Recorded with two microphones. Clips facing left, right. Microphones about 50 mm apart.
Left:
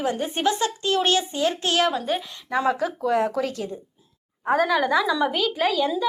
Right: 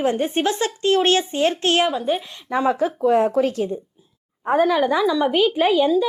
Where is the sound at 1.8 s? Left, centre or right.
Centre.